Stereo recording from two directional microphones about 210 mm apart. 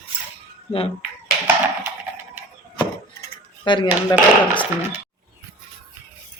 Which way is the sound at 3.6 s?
20° left (ahead or behind).